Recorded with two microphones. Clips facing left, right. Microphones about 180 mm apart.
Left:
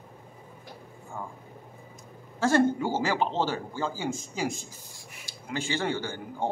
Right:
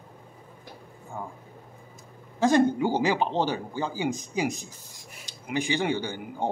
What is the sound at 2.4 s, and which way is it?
A woman's voice, 15° right (ahead or behind).